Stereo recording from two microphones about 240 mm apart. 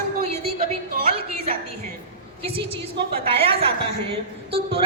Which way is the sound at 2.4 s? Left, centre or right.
Right.